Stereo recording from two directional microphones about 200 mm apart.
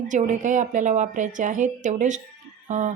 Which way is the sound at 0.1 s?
35° right (ahead or behind).